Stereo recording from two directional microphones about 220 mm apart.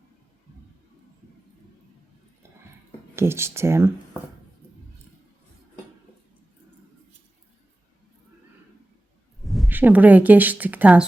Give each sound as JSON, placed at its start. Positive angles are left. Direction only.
{"t": 3.2, "sound": "speech", "side_deg": -10}
{"t": 9.4, "sound": "speech", "side_deg": 0}